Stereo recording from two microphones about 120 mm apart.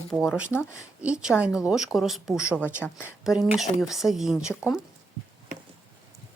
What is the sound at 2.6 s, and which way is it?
Speech, 20° left (ahead or behind).